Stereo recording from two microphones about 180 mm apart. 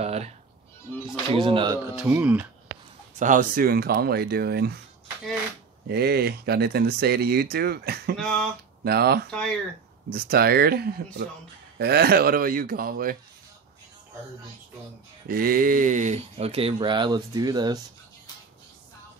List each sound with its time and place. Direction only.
0.0 s music: 35° right (ahead or behind)
1.3 s speech: 30° right (ahead or behind)
2.0 s speech: 10° right (ahead or behind)
3.2 s speech: 45° right (ahead or behind)
5.9 s speech: 60° right (ahead or behind)
8.2 s a sound: 5° left (ahead or behind)
8.8 s speech: 60° right (ahead or behind)
9.3 s a sound: 5° left (ahead or behind)
10.3 s speech: 60° right (ahead or behind)
15.2 s speech: 55° right (ahead or behind); by 17.7 s 20° right (ahead or behind)